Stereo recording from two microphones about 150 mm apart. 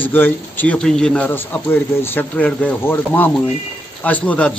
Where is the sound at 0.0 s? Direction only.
10° left (ahead or behind).